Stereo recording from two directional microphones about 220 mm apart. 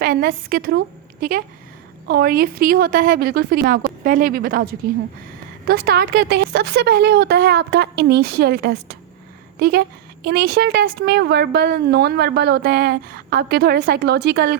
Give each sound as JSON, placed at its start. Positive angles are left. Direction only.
{"t": 0.0, "sound": "a woman's voice", "side_deg": -40}